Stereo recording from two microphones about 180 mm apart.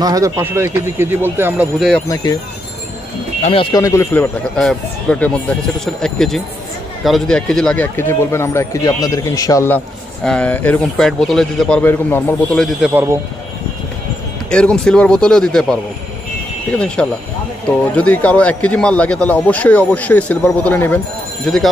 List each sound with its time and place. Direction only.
0.0 s speech: 20° right (ahead or behind)
1.8 s a man's voice: centre (ahead or behind)
3.7 s a man's voice: 15° left (ahead or behind)
10.2 s a man's voice: 5° left (ahead or behind)
12.8 s speech: 10° right (ahead or behind)
14.5 s a man's voice: 5° left (ahead or behind)